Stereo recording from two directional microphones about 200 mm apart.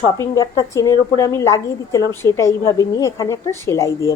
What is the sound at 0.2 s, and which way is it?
A woman's voice, 15° left (ahead or behind).